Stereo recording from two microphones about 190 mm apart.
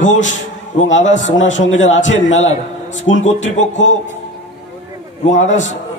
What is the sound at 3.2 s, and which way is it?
Speech, 40° left (ahead or behind).